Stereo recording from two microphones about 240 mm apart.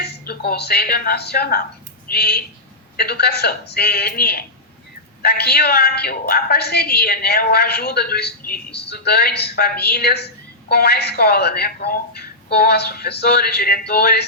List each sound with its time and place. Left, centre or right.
0.0 s a woman's voice: left